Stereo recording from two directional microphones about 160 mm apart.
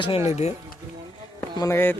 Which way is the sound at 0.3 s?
45° left (ahead or behind).